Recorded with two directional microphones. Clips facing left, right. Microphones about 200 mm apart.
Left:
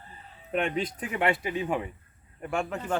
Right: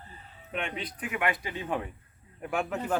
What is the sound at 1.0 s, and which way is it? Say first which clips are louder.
Speech: left 1 dB; 30° left (ahead or behind).